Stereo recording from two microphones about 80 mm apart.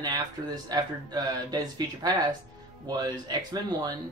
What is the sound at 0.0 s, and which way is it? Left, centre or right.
A man's voice, right.